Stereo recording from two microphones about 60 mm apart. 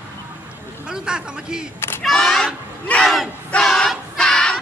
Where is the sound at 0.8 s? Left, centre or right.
Centre.